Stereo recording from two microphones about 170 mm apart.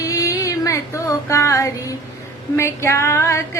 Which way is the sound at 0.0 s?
20° left (ahead or behind).